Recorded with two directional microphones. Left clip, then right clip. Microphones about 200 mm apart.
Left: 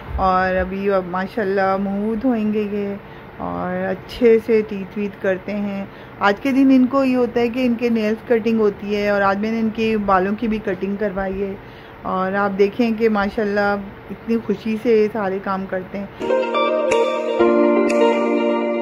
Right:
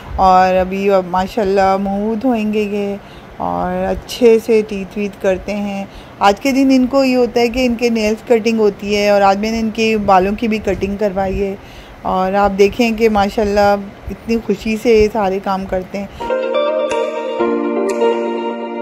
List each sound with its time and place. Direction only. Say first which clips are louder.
0.2 s speech: right 7 dB; 15° right (ahead or behind)
16.3 s music: right 3 dB; centre (ahead or behind)